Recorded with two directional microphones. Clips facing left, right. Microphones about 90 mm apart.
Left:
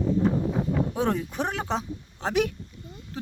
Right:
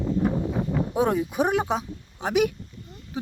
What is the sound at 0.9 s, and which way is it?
Speech, 10° right (ahead or behind).